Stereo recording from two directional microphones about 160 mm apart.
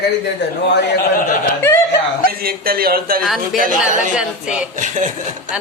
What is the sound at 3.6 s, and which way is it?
Speech, 60° right (ahead or behind).